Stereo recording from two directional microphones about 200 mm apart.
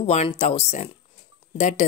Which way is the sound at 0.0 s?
30° left (ahead or behind).